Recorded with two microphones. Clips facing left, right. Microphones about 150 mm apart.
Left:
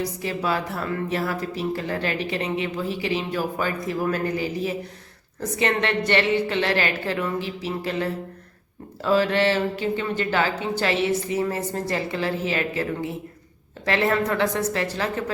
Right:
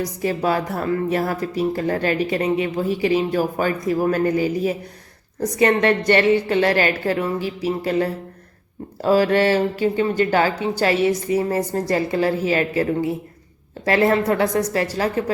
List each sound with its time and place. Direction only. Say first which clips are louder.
0.0 s a woman's voice: right 5 dB; 45° right (ahead or behind)